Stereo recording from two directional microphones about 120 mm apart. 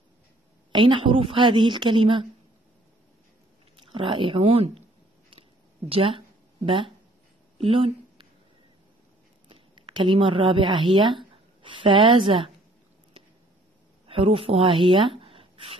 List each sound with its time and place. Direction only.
0.7 s a woman's voice: 40° right (ahead or behind)
3.7 s speech: 45° right (ahead or behind)
5.9 s speech: 50° right (ahead or behind)
7.5 s a sound: 50° right (ahead or behind)
9.5 s a woman's voice: 45° right (ahead or behind)
14.0 s speech: 50° right (ahead or behind)